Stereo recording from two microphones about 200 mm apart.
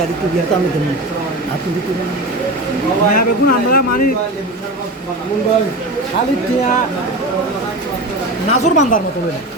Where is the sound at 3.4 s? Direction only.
50° left (ahead or behind).